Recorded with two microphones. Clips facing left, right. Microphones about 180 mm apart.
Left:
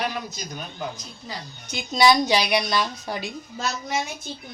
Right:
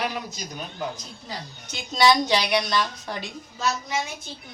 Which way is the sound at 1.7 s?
10° left (ahead or behind).